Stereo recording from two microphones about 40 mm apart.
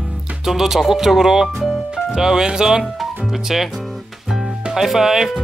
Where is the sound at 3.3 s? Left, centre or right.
Centre.